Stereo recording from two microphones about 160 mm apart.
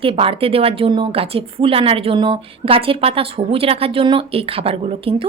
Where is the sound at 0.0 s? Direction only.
35° right (ahead or behind).